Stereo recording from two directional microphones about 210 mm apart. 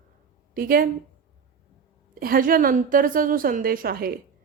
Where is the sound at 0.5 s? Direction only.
45° right (ahead or behind).